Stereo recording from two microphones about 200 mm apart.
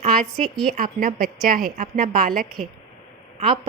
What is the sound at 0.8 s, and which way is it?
A woman's voice, 45° right (ahead or behind).